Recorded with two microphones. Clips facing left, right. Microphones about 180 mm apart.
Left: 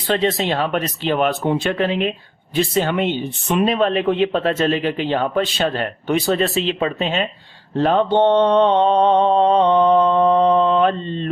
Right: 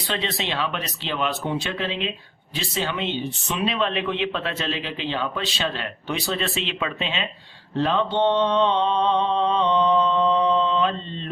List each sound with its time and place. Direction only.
0.1 s speech: 45° left (ahead or behind)
7.8 s mantra: 50° left (ahead or behind)